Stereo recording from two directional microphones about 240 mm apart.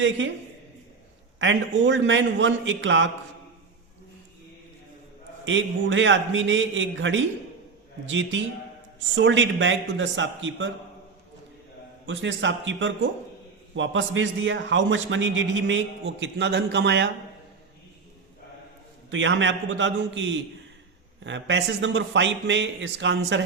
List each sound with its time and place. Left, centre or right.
1.4 s a man's voice: right
5.5 s a man's voice: right
12.0 s a man's voice: right
19.1 s a man's voice: right